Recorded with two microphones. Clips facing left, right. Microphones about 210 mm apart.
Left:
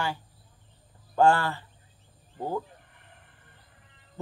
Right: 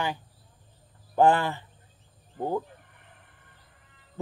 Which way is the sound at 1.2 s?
20° right (ahead or behind).